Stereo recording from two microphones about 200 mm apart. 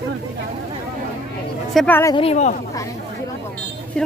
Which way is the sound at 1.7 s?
10° left (ahead or behind).